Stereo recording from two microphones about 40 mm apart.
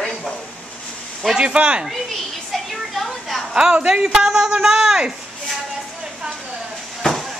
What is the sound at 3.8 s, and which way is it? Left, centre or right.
A man's voice, centre.